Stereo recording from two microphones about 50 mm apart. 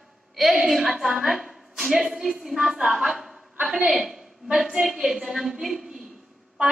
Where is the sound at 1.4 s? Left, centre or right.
Centre.